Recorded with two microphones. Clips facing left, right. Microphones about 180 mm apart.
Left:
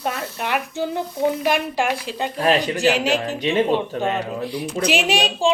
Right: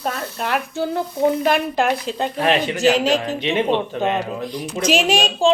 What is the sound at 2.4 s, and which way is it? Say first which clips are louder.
Speech: left 1 dB; 40° left (ahead or behind).